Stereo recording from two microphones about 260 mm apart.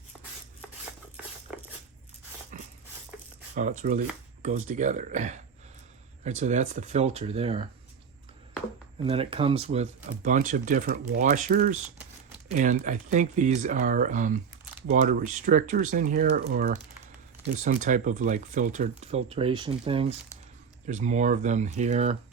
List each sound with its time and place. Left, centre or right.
3.5 s speech: right
9.0 s speech: right